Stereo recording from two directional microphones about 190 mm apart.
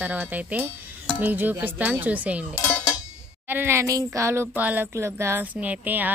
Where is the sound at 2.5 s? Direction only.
15° left (ahead or behind).